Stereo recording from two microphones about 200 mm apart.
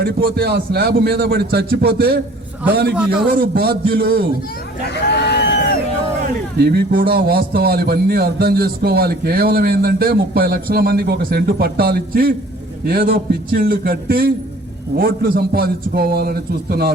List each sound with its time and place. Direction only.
0.0 s a man's voice: 50° right (ahead or behind)
3.3 s a man's voice: 50° right (ahead or behind)
4.9 s a sound: 55° left (ahead or behind)
6.6 s a man's voice: 55° right (ahead or behind)